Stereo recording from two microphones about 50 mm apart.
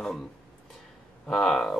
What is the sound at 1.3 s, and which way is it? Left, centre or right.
Speech, centre.